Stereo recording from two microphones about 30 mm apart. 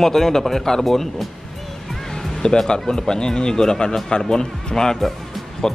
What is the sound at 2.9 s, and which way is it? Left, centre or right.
Speech, left.